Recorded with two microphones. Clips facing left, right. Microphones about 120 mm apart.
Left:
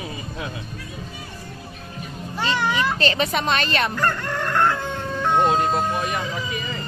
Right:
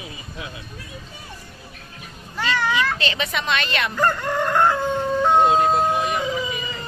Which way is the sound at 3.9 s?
10° right (ahead or behind).